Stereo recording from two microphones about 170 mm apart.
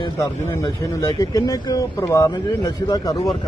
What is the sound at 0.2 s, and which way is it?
Speech, 15° left (ahead or behind).